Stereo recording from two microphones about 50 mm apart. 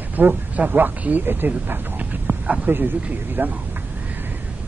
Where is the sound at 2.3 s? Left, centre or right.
Right.